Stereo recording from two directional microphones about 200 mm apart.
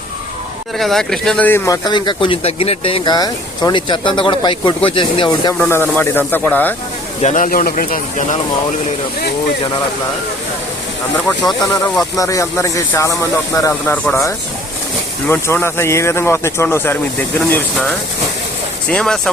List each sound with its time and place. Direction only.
0.8 s speech: centre (ahead or behind); by 5.5 s 25° left (ahead or behind)
5.5 s speech: 10° left (ahead or behind)
7.2 s speech: 35° left (ahead or behind)
11.7 s speech: 15° left (ahead or behind)